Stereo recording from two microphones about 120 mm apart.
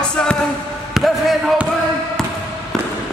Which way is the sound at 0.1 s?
5° left (ahead or behind).